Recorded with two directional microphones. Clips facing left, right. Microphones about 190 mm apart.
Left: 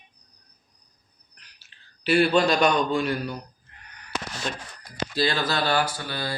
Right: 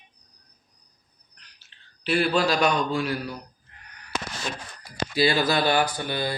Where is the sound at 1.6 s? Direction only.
5° left (ahead or behind).